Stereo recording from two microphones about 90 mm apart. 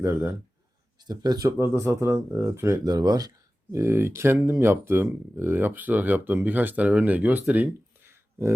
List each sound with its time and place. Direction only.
0.0 s speech: 30° right (ahead or behind)
0.9 s speech: 50° right (ahead or behind); by 2.7 s 30° right (ahead or behind)
2.8 s speech: 45° right (ahead or behind)
3.8 s speech: 30° right (ahead or behind)
8.0 s a sound: 30° right (ahead or behind)